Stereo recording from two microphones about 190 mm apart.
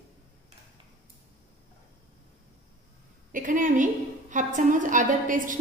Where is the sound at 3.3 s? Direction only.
45° right (ahead or behind).